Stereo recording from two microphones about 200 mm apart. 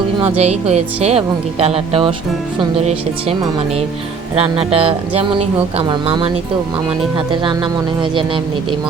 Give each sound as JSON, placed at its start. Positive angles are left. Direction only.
{"t": 0.2, "sound": "speech", "side_deg": -30}
{"t": 4.4, "sound": "speech", "side_deg": -30}